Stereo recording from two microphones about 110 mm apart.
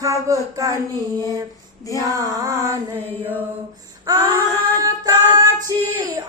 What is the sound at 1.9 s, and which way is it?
Child singing, 35° right (ahead or behind).